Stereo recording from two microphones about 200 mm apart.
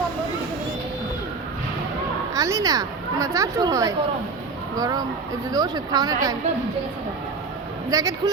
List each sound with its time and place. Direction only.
2.3 s speech: 15° right (ahead or behind)
7.9 s speech: 20° right (ahead or behind)